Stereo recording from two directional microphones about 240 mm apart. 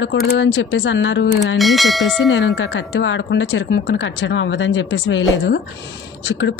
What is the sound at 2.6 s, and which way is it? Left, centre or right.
A woman's voice, left.